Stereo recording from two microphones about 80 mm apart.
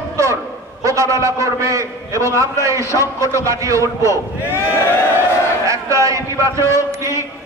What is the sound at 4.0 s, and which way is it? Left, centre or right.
Speech, left.